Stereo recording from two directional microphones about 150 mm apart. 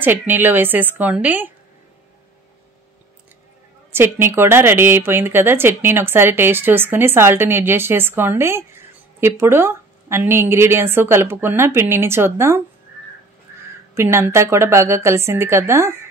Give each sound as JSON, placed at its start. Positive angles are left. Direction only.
{"t": 0.0, "sound": "speech", "side_deg": -15}
{"t": 3.9, "sound": "speech", "side_deg": -15}
{"t": 13.9, "sound": "speech", "side_deg": -15}